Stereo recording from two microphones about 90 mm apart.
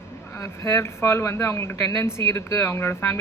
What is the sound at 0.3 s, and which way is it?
A man's voice, 30° left (ahead or behind).